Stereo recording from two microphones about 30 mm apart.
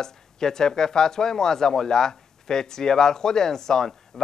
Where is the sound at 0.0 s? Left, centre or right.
Centre.